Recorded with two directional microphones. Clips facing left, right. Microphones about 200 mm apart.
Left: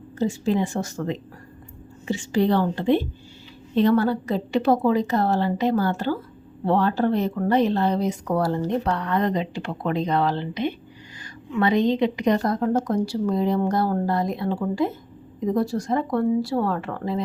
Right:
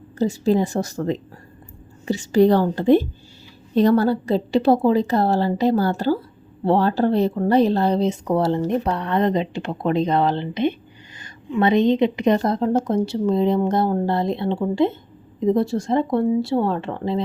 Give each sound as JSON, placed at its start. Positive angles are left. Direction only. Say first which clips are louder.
{"t": 0.2, "sound": "a woman's voice", "louder": "right 4 dB", "side_deg": -35}